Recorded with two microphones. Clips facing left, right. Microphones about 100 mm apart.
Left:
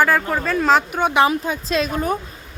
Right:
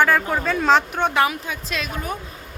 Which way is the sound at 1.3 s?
35° left (ahead or behind).